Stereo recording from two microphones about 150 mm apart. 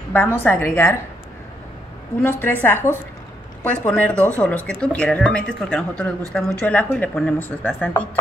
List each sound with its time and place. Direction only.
0.1 s speech: 15° left (ahead or behind)
2.4 s speech: 10° left (ahead or behind)